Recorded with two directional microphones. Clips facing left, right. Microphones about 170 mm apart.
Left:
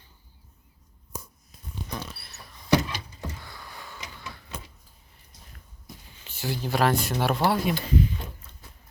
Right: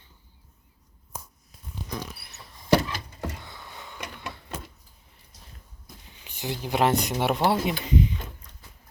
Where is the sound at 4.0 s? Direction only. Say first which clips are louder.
Right 8 dB; 65° right (ahead or behind).